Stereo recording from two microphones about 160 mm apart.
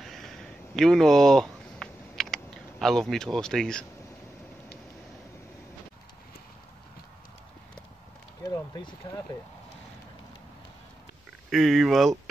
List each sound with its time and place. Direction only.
0.0 s a sound: centre (ahead or behind)
8.5 s speech: 25° left (ahead or behind)
11.5 s speech: centre (ahead or behind)